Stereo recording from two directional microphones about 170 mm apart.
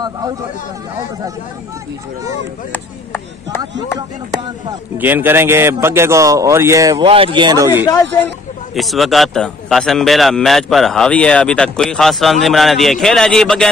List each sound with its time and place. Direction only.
2.7 s speech: 15° left (ahead or behind)
4.9 s speech: 10° right (ahead or behind)
7.1 s speech: 30° right (ahead or behind)
7.7 s speech: 25° left (ahead or behind)
8.7 s a man's voice: centre (ahead or behind)